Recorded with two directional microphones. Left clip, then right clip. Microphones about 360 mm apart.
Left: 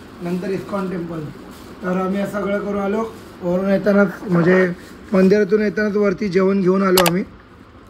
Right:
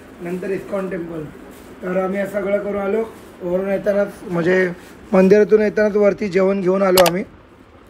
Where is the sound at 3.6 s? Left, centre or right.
Left.